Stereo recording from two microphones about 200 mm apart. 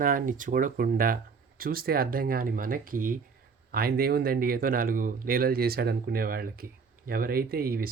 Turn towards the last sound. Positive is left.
turn(degrees=-50)  # may be behind; listen again after turning